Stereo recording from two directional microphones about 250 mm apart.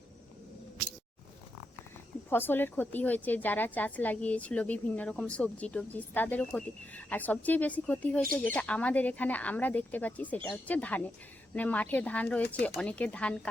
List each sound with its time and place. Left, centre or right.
2.3 s a woman's voice: centre